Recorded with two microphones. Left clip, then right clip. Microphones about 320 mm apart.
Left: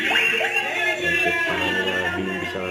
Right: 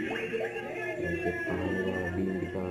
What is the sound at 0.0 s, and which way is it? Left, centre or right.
Music, centre.